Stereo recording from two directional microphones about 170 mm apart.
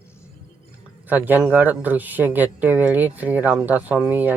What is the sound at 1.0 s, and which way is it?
Speech, 10° right (ahead or behind).